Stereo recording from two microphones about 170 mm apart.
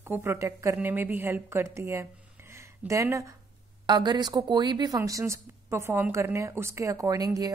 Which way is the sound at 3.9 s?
25° right (ahead or behind).